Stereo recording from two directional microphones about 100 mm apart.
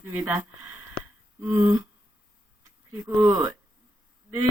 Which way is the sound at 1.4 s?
30° right (ahead or behind).